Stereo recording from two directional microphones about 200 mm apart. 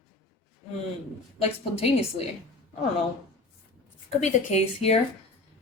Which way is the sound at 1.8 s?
30° left (ahead or behind).